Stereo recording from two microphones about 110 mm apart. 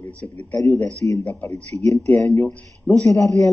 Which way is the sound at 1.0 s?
20° left (ahead or behind).